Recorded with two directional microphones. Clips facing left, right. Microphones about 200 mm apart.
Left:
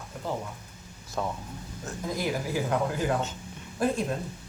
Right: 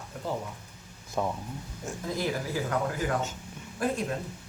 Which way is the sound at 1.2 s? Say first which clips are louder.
Right 2 dB; 10° right (ahead or behind).